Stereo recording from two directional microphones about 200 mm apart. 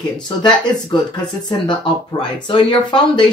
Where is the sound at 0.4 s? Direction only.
20° left (ahead or behind).